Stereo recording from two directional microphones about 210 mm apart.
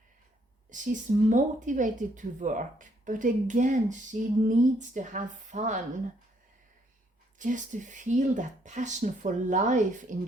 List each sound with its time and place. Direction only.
0.7 s speech: 35° right (ahead or behind)
7.3 s speech: 35° right (ahead or behind)